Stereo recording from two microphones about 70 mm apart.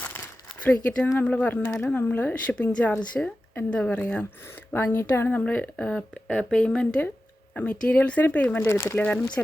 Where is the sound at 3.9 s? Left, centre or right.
Left.